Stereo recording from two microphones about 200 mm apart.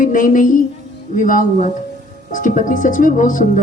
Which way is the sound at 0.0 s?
40° left (ahead or behind).